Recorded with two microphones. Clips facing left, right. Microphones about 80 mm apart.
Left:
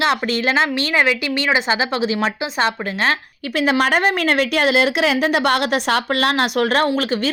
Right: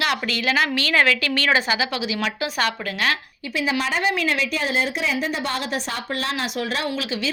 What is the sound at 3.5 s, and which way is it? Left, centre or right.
A woman's voice, left.